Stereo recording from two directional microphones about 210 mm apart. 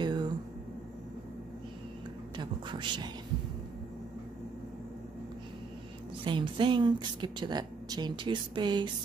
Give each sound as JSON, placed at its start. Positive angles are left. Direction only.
{"t": 0.0, "sound": "a sound", "side_deg": -20}
{"t": 2.3, "sound": "speech", "side_deg": -20}
{"t": 6.2, "sound": "a woman's voice", "side_deg": -25}